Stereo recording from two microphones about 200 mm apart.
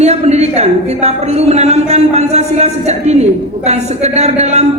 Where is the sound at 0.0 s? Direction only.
35° right (ahead or behind).